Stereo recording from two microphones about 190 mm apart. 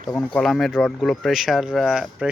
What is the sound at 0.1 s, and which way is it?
Speech, 5° left (ahead or behind).